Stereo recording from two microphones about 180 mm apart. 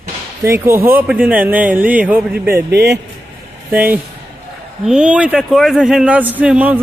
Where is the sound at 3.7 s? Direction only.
10° right (ahead or behind).